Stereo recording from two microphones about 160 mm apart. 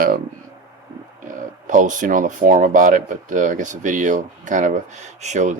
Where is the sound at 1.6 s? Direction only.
50° right (ahead or behind).